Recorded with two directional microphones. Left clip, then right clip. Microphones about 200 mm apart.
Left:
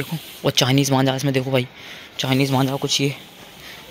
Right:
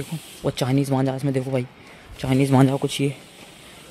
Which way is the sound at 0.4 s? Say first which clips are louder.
Left 5 dB; 10° right (ahead or behind).